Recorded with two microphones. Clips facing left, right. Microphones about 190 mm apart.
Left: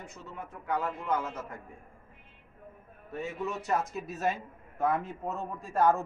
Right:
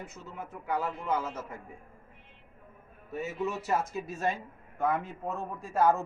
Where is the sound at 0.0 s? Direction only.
5° right (ahead or behind).